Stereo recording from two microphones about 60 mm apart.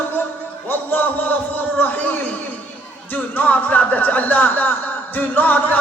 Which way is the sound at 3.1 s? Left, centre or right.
Left.